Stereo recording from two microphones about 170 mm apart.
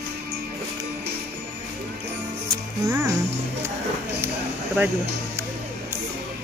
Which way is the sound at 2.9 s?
15° right (ahead or behind).